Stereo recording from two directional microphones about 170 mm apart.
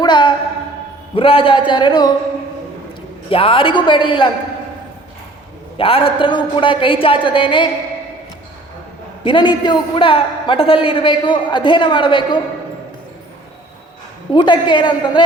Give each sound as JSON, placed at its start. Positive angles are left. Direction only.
{"t": 0.0, "sound": "a sound", "side_deg": 25}
{"t": 1.1, "sound": "a man's voice", "side_deg": 30}
{"t": 3.2, "sound": "a man's voice", "side_deg": 30}
{"t": 5.7, "sound": "a man's voice", "side_deg": 35}
{"t": 9.2, "sound": "a man's voice", "side_deg": 30}
{"t": 14.3, "sound": "a man's voice", "side_deg": 30}